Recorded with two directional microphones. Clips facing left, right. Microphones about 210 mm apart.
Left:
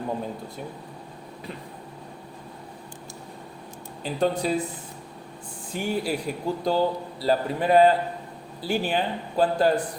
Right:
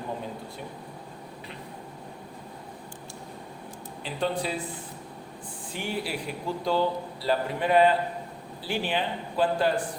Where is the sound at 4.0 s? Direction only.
45° left (ahead or behind).